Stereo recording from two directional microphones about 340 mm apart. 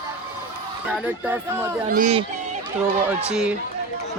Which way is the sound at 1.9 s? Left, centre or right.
Right.